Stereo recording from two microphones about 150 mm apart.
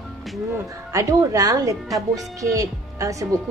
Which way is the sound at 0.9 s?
20° right (ahead or behind).